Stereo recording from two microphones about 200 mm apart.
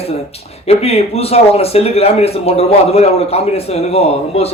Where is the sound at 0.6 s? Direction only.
30° left (ahead or behind).